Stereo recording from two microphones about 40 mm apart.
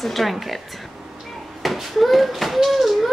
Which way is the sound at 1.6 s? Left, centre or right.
Centre.